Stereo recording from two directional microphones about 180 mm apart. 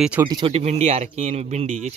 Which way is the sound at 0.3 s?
30° right (ahead or behind).